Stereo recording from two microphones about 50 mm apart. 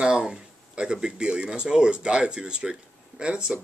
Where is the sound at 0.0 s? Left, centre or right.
Centre.